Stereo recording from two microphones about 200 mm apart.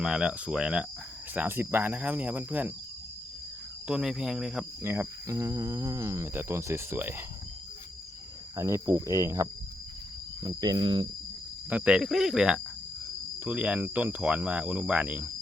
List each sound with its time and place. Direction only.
0.0 s speech: 5° right (ahead or behind)
3.8 s speech: 5° right (ahead or behind)
8.5 s speech: 15° right (ahead or behind)
10.4 s cricket: 20° right (ahead or behind)
11.7 s speech: 5° right (ahead or behind)